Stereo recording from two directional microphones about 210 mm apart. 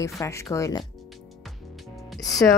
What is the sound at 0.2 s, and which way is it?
Speech, 15° left (ahead or behind).